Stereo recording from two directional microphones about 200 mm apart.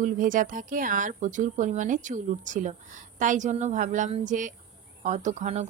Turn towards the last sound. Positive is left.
turn(degrees=-35)  # may be behind; listen again after turning